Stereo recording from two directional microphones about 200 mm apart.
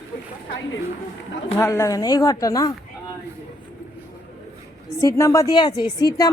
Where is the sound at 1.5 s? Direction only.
15° left (ahead or behind).